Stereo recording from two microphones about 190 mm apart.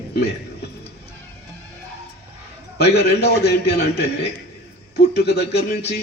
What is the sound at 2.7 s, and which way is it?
Speech, 60° left (ahead or behind).